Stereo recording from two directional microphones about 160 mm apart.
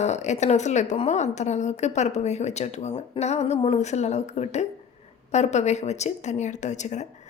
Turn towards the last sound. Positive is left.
turn(degrees=45)  # may be behind; listen again after turning